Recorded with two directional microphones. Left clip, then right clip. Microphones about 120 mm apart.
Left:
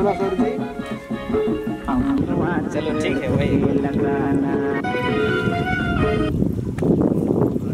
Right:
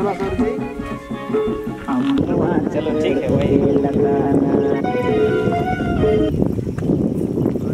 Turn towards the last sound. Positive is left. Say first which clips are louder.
# right 5 dB
turn(degrees=45)  # may be behind; listen again after turning